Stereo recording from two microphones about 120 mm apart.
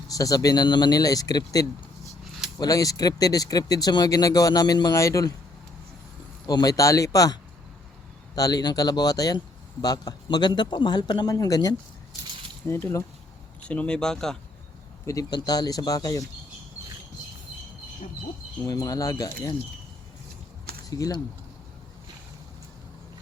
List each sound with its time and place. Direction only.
0.1 s speech: 30° left (ahead or behind)
6.5 s speech: 30° left (ahead or behind)
8.4 s speech: 30° left (ahead or behind)
12.6 s speech: 20° left (ahead or behind)
13.7 s speech: 10° left (ahead or behind)
15.0 s speech: 30° left (ahead or behind)
18.6 s speech: 30° left (ahead or behind)
20.9 s speech: 30° left (ahead or behind)